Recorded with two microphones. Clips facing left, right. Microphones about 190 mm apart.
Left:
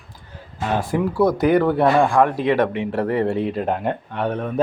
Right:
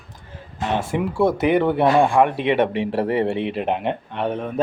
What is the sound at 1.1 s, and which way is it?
Speech, 25° right (ahead or behind).